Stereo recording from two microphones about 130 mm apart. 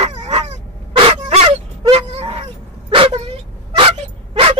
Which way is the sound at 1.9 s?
50° right (ahead or behind).